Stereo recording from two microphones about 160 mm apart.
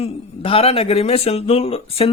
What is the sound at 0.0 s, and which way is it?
Speech, 35° left (ahead or behind).